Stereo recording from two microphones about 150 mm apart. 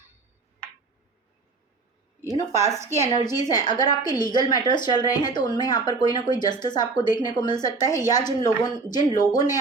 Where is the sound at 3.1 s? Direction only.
25° left (ahead or behind).